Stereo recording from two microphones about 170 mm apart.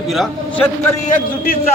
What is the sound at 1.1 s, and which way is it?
Speech, 60° left (ahead or behind).